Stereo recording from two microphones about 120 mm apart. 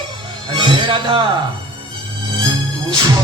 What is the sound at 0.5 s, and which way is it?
Music, 40° right (ahead or behind).